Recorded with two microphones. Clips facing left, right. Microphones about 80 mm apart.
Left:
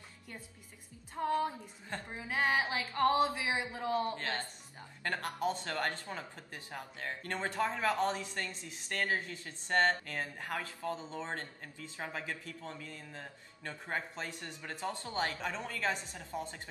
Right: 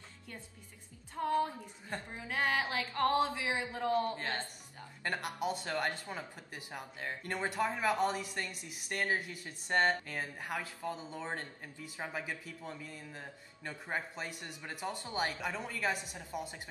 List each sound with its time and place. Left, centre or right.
1.2 s a woman's voice: centre
4.2 s speech: centre